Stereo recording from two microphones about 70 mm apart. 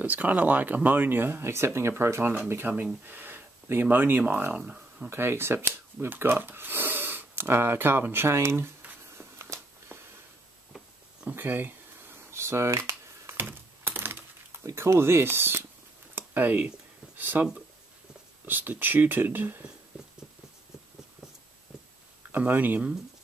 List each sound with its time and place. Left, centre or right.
0.0 s speech: right
2.7 s speech: right
5.1 s speech: right
9.2 s a sound: right
11.2 s speech: right
12.3 s computer keyboard: right
14.7 s speech: right
22.3 s speech: right